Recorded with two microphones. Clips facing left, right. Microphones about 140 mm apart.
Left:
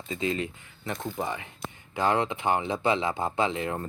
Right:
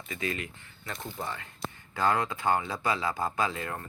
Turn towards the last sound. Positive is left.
turn(degrees=20)  # may be behind; listen again after turning